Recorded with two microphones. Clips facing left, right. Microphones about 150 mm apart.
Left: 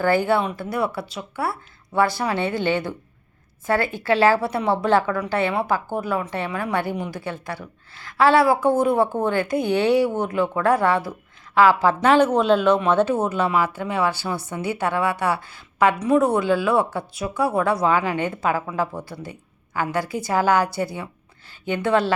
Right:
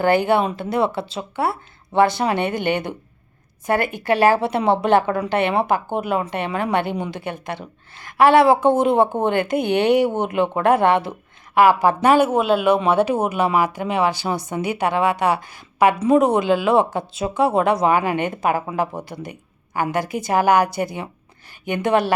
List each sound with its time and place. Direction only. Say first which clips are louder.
0.0 s a woman's voice: right 2 dB; 20° right (ahead or behind)